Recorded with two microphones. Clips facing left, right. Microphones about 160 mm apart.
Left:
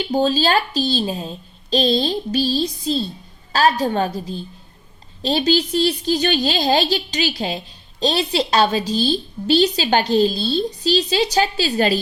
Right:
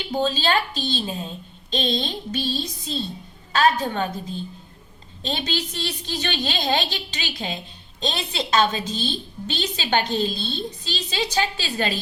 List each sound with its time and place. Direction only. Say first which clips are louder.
0.1 s a woman's voice: left 4 dB; 40° left (ahead or behind)